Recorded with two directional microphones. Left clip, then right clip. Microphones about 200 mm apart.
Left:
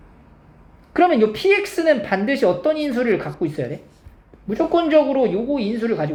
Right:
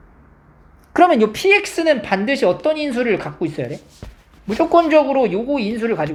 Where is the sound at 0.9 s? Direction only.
35° right (ahead or behind).